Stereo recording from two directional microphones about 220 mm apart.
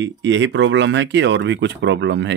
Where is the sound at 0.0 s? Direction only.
55° right (ahead or behind).